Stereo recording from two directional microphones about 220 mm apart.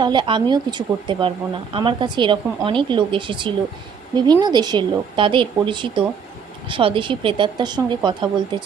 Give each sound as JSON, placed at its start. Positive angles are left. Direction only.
{"t": 0.0, "sound": "a woman's voice", "side_deg": -20}